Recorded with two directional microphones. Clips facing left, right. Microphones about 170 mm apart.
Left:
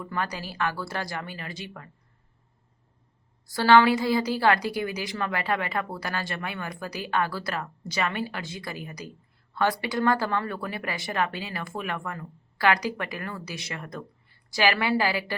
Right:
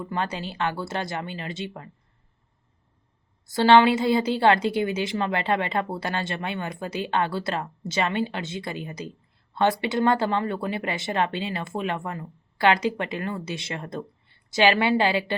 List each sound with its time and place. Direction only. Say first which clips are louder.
0.0 s a woman's voice: right 3 dB; 25° right (ahead or behind)
3.4 s a woman's voice: right 2 dB; 20° right (ahead or behind)